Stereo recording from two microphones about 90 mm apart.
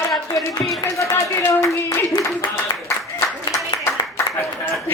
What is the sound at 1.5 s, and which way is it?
Speech, 35° left (ahead or behind).